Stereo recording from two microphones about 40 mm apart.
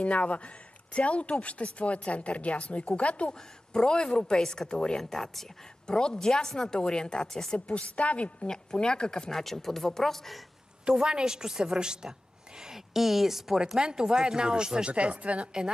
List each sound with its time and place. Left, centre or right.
0.0 s speech: left
3.7 s speech: left
5.1 s speech: centre
5.9 s speech: left
7.5 s speech: left
8.5 s speech: left
9.3 s speech: centre
10.9 s a woman's voice: centre
12.9 s speech: centre
13.7 s speech: centre
14.9 s speech: right